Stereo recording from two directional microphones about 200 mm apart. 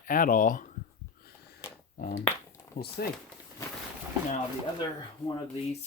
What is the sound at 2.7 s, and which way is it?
Speech, 50° left (ahead or behind).